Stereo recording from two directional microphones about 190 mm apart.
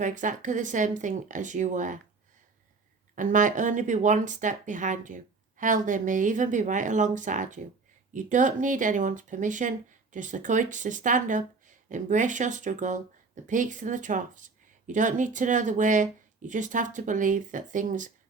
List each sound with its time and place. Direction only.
0.0 s speech: 40° right (ahead or behind)
3.2 s speech: 45° right (ahead or behind)